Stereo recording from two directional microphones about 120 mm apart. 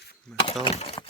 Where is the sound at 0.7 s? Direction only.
60° left (ahead or behind).